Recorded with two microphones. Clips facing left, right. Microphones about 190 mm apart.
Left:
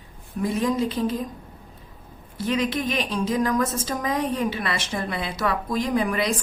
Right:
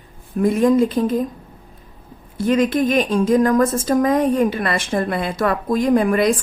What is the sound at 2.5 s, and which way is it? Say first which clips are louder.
A woman's voice: right 8 dB; 50° right (ahead or behind).